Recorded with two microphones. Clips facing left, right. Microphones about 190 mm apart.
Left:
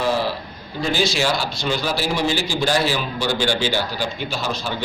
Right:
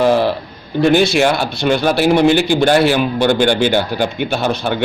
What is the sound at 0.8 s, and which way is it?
A man's voice, 60° right (ahead or behind).